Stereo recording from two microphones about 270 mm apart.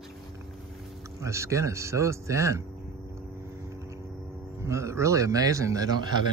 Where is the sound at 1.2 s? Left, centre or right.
Centre.